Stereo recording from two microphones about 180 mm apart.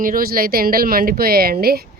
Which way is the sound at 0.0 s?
55° right (ahead or behind).